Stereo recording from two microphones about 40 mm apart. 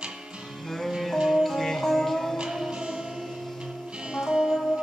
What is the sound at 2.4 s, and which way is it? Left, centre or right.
Music, centre.